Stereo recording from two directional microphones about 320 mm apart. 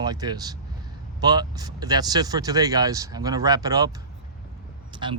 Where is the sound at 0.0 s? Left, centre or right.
Centre.